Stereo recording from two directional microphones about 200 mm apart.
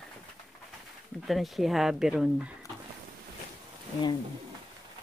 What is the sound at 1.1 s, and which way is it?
Speech, centre (ahead or behind).